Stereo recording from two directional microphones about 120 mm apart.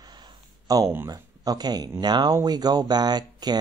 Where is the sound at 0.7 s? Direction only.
30° right (ahead or behind).